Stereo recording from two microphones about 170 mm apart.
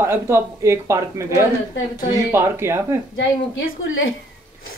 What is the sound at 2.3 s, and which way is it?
Speech, 15° right (ahead or behind).